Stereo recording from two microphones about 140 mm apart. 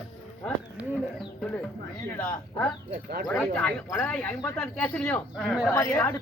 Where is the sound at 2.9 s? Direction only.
90° right.